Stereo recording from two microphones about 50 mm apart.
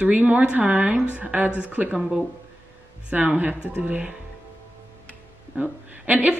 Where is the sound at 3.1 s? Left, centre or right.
Right.